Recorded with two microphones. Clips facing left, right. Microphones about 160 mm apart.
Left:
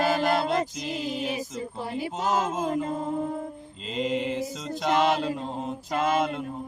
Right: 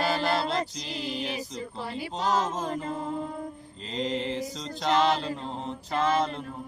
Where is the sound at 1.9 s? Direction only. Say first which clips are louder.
Left 1 dB; 15° left (ahead or behind).